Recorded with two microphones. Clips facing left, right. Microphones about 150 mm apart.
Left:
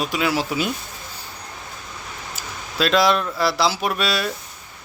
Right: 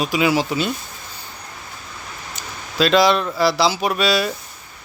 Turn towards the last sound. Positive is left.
turn(degrees=0)  # may be behind; listen again after turning